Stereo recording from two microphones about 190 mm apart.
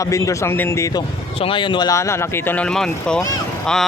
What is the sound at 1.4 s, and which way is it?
Speech, 25° left (ahead or behind).